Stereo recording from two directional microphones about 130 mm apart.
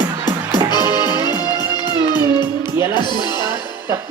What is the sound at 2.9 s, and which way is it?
Speech, 35° left (ahead or behind).